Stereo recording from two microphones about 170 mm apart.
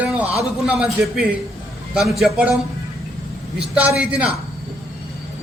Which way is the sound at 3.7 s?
10° right (ahead or behind).